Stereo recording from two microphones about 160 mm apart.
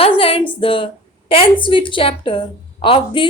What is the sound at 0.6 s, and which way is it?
A woman's voice, 35° left (ahead or behind).